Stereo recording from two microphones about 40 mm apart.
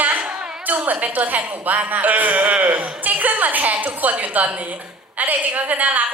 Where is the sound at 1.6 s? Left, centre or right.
Right.